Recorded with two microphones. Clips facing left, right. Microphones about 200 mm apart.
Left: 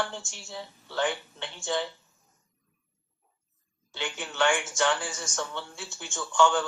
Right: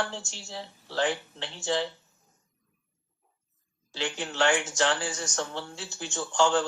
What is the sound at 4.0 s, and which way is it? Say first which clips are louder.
Speech: right 1 dB; 35° right (ahead or behind).